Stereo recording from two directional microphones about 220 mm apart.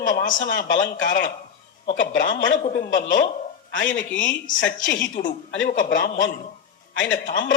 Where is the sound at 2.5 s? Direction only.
35° left (ahead or behind).